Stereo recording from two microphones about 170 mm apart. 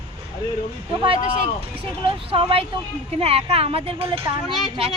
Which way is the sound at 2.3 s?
35° right (ahead or behind).